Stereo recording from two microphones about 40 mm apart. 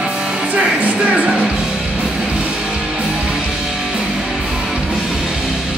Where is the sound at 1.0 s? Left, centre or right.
Right.